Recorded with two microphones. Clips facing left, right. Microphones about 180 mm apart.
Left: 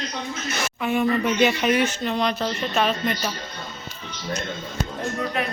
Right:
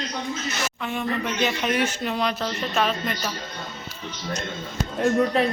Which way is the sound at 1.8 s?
10° right (ahead or behind).